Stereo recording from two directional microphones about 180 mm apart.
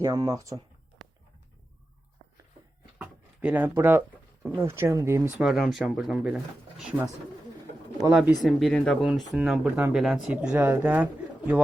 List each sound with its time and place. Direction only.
0.0 s speech: 20° right (ahead or behind)
3.0 s speech: 10° right (ahead or behind)
5.4 s speech: centre (ahead or behind)
8.4 s speech: centre (ahead or behind)